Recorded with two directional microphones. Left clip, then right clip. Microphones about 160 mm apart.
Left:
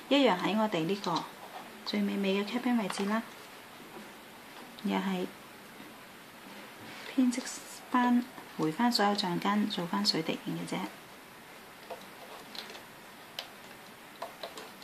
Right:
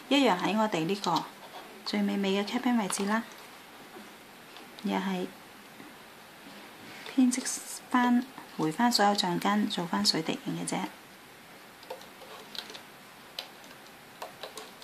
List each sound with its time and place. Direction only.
0.1 s speech: 20° right (ahead or behind)
4.8 s speech: 10° right (ahead or behind)
7.2 s a woman's voice: 20° right (ahead or behind)